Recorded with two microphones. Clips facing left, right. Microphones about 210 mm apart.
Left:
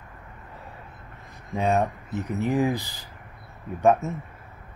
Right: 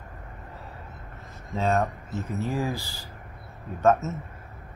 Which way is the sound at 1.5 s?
15° left (ahead or behind).